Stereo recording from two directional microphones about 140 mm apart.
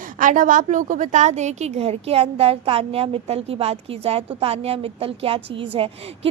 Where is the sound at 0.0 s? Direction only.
70° right (ahead or behind).